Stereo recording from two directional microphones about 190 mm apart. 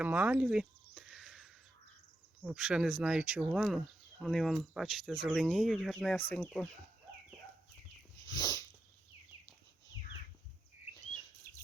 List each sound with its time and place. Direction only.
0.0 s a sound: 10° right (ahead or behind)
2.4 s speech: 5° right (ahead or behind)
8.2 s dog: 20° left (ahead or behind)